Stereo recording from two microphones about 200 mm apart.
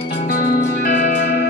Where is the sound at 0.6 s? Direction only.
35° left (ahead or behind).